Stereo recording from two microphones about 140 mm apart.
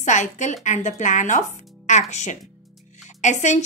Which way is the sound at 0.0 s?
60° left (ahead or behind).